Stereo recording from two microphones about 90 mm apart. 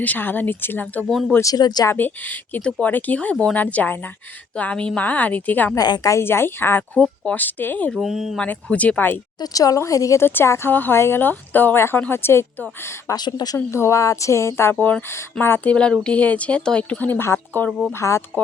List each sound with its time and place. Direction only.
0.0 s speech: 20° left (ahead or behind)
1.4 s speech: 45° left (ahead or behind)
1.9 s speech: 20° left (ahead or behind)
5.7 s speech: 45° left (ahead or behind)
6.1 s speech: 25° left (ahead or behind)
7.9 s speech: 5° right (ahead or behind)
8.4 s speech: 15° left (ahead or behind)
9.4 s speech: 40° left (ahead or behind)
13.1 s speech: 50° left (ahead or behind)
13.7 s speech: 30° left (ahead or behind)
15.7 s speech: 10° left (ahead or behind)
17.7 s speech: 5° right (ahead or behind)
17.9 s speech: 35° left (ahead or behind)